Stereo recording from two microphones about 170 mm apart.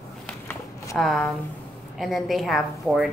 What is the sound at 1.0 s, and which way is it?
A woman's voice, centre (ahead or behind).